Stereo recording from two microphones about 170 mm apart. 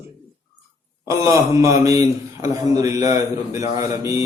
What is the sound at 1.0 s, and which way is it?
A man's voice, 15° right (ahead or behind).